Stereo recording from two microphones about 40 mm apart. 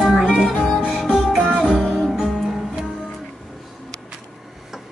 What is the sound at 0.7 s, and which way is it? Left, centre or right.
Music, centre.